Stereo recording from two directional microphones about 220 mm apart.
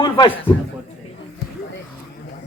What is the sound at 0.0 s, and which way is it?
Speech, 20° left (ahead or behind).